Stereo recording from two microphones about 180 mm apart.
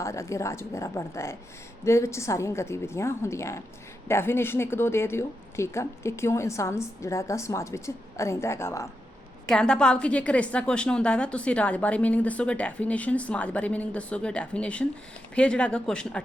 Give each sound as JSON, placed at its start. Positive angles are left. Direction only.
{"t": 0.0, "sound": "a woman's voice", "side_deg": 15}
{"t": 9.5, "sound": "a woman's voice", "side_deg": 5}